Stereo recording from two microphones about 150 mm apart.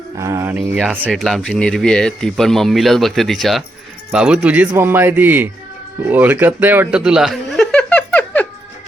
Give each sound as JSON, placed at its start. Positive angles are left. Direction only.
{"t": 0.2, "sound": "speech", "side_deg": -20}
{"t": 1.1, "sound": "speech", "side_deg": 5}
{"t": 6.1, "sound": "chuckle", "side_deg": -10}